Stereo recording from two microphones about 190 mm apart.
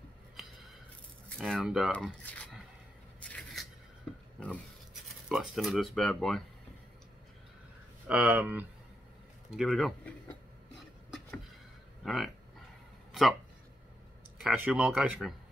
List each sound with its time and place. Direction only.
1.4 s speech: centre (ahead or behind)
3.2 s a sound: 5° left (ahead or behind)
5.0 s speech: centre (ahead or behind)
8.1 s speech: 10° right (ahead or behind)
11.1 s a sound: centre (ahead or behind)
12.0 s speech: centre (ahead or behind)
14.4 s speech: 5° right (ahead or behind)